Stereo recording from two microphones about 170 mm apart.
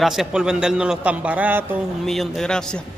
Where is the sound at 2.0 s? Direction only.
Centre (ahead or behind).